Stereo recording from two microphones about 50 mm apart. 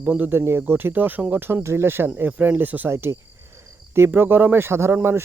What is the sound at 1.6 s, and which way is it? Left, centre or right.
Speech, right.